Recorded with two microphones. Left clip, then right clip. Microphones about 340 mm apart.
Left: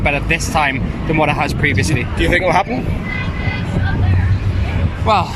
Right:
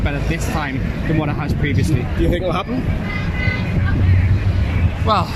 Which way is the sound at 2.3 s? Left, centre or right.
Left.